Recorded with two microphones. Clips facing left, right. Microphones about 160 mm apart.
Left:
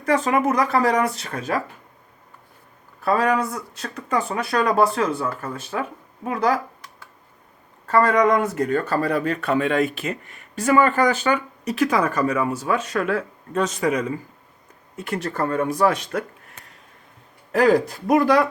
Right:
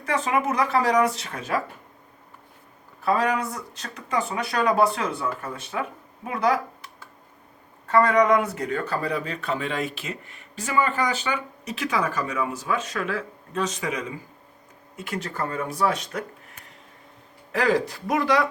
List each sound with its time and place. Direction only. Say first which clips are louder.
0.0 s speech: left 5 dB; 50° left (ahead or behind)
3.0 s speech: left 3 dB; 50° left (ahead or behind)
7.9 s speech: left 1 dB; 45° left (ahead or behind)
12.5 s speech: left 4 dB; 45° left (ahead or behind)
15.0 s speech: left 5 dB; 50° left (ahead or behind)
17.5 s speech: left 5 dB; 45° left (ahead or behind)